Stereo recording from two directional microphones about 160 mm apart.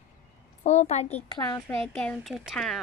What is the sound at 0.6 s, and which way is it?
Speech, 45° left (ahead or behind).